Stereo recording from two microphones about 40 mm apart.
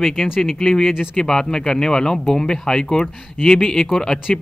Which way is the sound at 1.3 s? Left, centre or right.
Centre.